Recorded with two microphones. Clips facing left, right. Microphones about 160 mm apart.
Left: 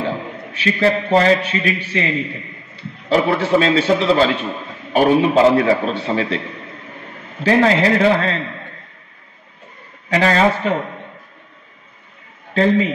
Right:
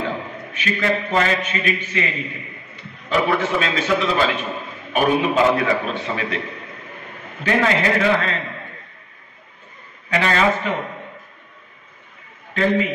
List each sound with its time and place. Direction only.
0.0 s a man's voice: 35° left (ahead or behind)
7.4 s a man's voice: 35° left (ahead or behind)
10.0 s a man's voice: 35° left (ahead or behind)